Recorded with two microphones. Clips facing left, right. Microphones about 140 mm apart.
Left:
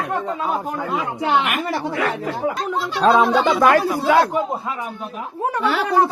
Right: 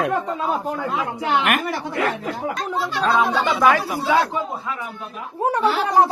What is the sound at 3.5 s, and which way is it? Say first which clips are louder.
Speech: right 1 dB; 10° left (ahead or behind).